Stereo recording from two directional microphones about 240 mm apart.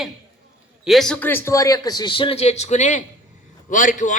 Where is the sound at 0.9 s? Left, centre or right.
Centre.